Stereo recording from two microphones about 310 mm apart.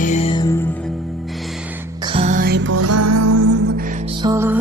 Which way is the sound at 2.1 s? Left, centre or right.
Right.